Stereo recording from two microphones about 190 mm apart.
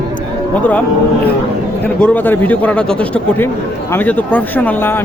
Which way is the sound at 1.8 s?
10° left (ahead or behind).